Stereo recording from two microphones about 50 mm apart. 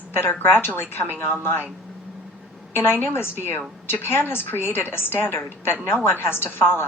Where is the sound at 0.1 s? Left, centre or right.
Left.